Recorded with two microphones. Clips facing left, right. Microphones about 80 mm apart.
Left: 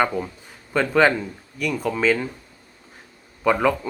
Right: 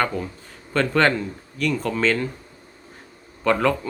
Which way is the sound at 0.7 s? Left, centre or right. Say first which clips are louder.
Left 1 dB; centre.